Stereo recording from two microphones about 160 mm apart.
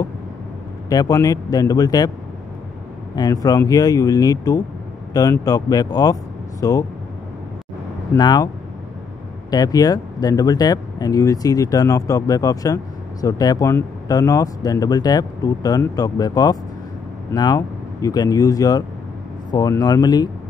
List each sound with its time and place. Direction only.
0.8 s speech: 25° left (ahead or behind)
3.2 s speech: 25° left (ahead or behind)
8.2 s speech: 25° left (ahead or behind)
9.5 s speech: 25° left (ahead or behind)